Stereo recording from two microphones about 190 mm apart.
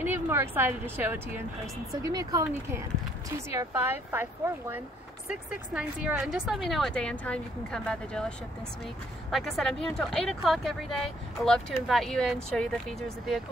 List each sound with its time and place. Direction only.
0.0 s a sound: 10° right (ahead or behind)
0.9 s speech: 10° right (ahead or behind); by 8.3 s 5° left (ahead or behind)
9.3 s speech: centre (ahead or behind)